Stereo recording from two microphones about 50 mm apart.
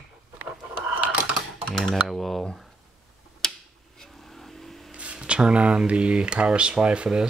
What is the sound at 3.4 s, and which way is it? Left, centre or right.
Tick-tock, centre.